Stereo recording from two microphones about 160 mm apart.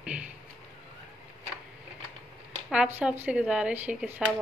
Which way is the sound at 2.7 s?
10° right (ahead or behind).